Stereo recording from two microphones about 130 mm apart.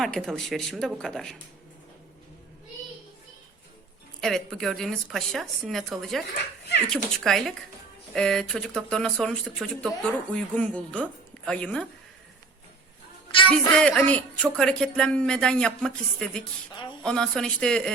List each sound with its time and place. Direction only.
0.0 s speech: 5° left (ahead or behind)
4.2 s a woman's voice: 5° left (ahead or behind)
13.5 s speech: 5° left (ahead or behind)